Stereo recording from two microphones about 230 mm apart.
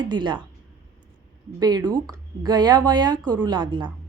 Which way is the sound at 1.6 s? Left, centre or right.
Centre.